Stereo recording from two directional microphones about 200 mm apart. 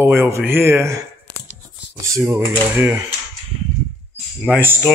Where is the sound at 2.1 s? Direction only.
15° right (ahead or behind).